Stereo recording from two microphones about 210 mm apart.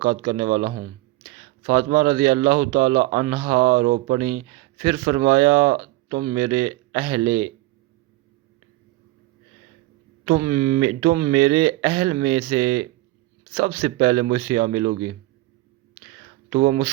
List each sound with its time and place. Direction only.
0.0 s speech: 35° right (ahead or behind)
2.0 s speech: 25° right (ahead or behind)
2.4 s speech: 40° right (ahead or behind); by 7.2 s 25° right (ahead or behind)
10.2 s speech: 25° right (ahead or behind)
16.5 s speech: 35° right (ahead or behind)